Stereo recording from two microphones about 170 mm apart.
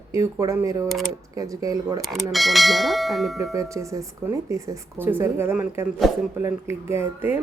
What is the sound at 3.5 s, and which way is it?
Speech, 20° right (ahead or behind).